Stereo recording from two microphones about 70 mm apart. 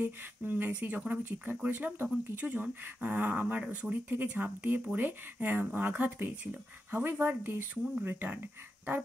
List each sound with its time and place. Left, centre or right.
0.0 s speech: right